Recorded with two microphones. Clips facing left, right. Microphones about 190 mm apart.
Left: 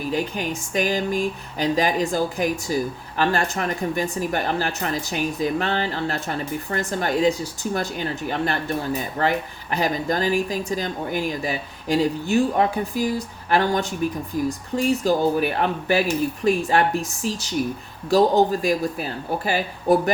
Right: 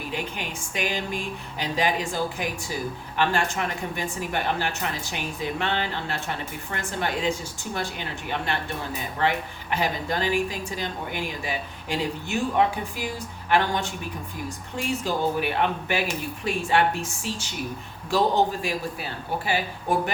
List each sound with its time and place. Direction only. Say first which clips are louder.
0.1 s speech: left 8 dB; 40° left (ahead or behind)